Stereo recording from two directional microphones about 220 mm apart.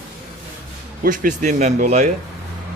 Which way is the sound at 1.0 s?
35° right (ahead or behind).